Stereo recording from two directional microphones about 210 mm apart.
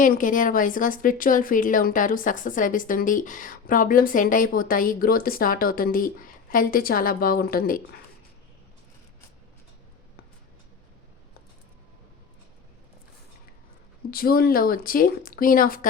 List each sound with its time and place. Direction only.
0.0 s speech: 40° left (ahead or behind)
14.1 s speech: 45° left (ahead or behind)